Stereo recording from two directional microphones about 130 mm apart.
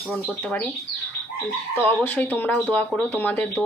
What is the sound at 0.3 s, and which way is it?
Speech, 10° left (ahead or behind).